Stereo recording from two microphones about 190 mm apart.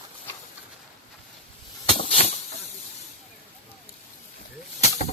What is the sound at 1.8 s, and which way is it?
Snake, 30° left (ahead or behind).